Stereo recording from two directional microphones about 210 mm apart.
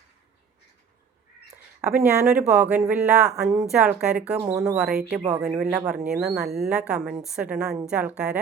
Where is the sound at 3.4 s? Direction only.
35° right (ahead or behind).